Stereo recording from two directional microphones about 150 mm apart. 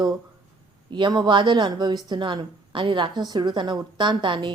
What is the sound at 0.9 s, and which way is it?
Speech, 30° right (ahead or behind).